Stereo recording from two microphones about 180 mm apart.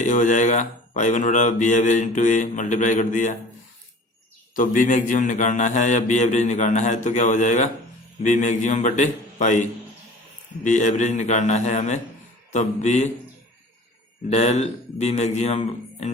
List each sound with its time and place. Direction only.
0.0 s speech: 45° left (ahead or behind)
4.5 s speech: 45° left (ahead or behind)
14.3 s speech: 40° left (ahead or behind)